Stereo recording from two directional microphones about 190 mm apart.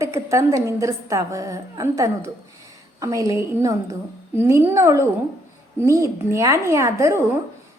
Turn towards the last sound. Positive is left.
turn(degrees=-15)  # may be behind; listen again after turning